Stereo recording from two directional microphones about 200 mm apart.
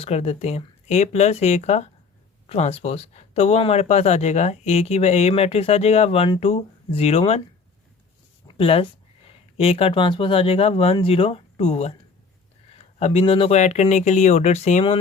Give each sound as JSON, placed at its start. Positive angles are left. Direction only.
{"t": 0.0, "sound": "speech", "side_deg": 30}
{"t": 8.4, "sound": "speech", "side_deg": 30}
{"t": 13.0, "sound": "speech", "side_deg": 30}